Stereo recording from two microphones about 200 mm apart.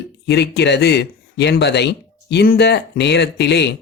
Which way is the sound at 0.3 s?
55° left (ahead or behind).